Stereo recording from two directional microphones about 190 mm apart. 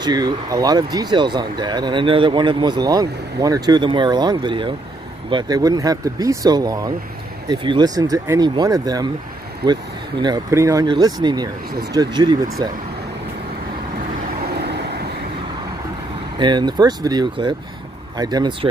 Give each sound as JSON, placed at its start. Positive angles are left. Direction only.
{"t": 0.0, "sound": "speech", "side_deg": -20}
{"t": 14.6, "sound": "vehicle", "side_deg": -60}
{"t": 16.3, "sound": "speech", "side_deg": -25}